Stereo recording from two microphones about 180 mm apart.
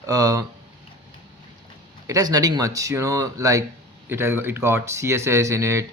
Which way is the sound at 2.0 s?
20° right (ahead or behind).